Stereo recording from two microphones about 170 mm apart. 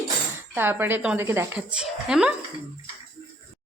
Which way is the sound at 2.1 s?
5° right (ahead or behind).